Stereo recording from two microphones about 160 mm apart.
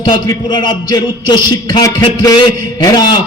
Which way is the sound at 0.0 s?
30° left (ahead or behind).